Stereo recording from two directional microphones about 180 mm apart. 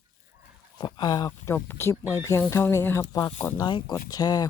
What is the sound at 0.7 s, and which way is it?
Speech, 25° left (ahead or behind).